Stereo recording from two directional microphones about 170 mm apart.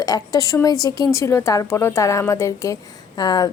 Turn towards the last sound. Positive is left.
turn(degrees=25)  # may be behind; listen again after turning